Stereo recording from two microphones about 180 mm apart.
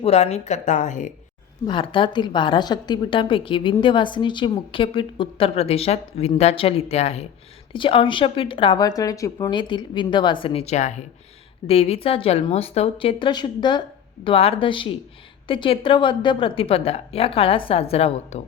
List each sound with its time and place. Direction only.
0.0 s a woman's voice: 35° left (ahead or behind)
1.6 s a woman's voice: 25° left (ahead or behind)